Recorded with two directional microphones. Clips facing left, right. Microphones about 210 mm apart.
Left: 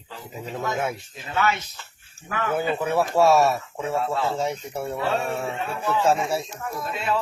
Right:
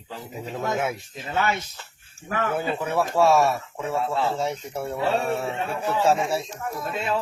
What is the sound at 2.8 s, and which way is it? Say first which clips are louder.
Speech: left 1 dB; 5° left (ahead or behind).